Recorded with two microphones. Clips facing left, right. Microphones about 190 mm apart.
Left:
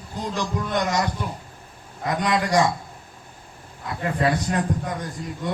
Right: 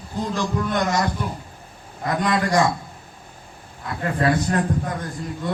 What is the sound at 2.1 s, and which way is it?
Speech, 15° left (ahead or behind).